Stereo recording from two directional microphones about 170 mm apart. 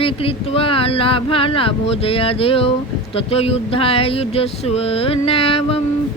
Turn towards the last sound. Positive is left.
turn(degrees=35)  # may be behind; listen again after turning